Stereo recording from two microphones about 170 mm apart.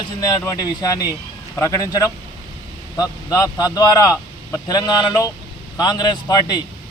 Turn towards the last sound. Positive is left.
turn(degrees=25)  # may be behind; listen again after turning